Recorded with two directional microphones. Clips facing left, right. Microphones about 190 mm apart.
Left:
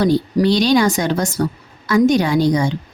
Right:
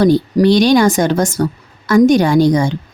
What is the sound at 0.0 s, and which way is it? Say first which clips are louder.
A woman's voice: right 4 dB; 50° right (ahead or behind).